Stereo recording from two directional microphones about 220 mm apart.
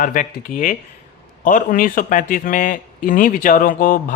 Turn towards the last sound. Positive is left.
turn(degrees=40)  # may be behind; listen again after turning